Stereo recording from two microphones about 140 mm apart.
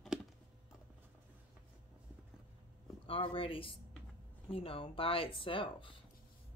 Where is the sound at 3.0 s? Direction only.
40° left (ahead or behind).